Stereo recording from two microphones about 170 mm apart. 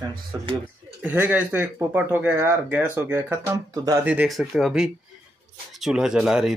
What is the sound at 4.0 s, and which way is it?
Speech, 10° right (ahead or behind).